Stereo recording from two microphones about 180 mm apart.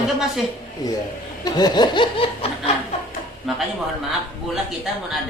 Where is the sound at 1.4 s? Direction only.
20° left (ahead or behind).